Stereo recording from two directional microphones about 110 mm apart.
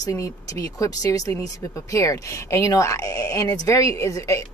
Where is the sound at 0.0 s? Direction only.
30° left (ahead or behind).